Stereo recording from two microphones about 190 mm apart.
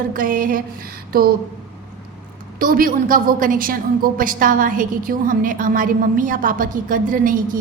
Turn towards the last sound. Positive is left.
turn(degrees=-45)  # may be behind; listen again after turning